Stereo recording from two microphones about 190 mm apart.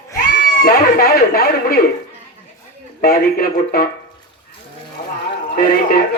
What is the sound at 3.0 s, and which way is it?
Speech, 50° left (ahead or behind).